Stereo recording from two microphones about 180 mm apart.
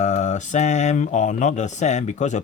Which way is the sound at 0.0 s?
40° left (ahead or behind).